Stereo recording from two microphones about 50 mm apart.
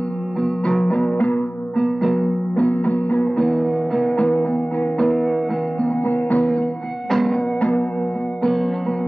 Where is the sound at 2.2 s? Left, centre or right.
Left.